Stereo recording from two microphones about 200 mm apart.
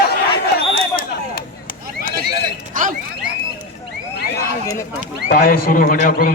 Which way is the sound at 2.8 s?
40° right (ahead or behind).